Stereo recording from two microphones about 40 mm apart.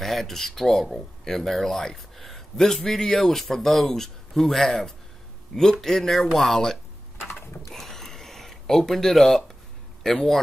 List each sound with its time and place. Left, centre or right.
0.0 s a man's voice: centre
7.7 s a sound: centre
10.0 s a man's voice: centre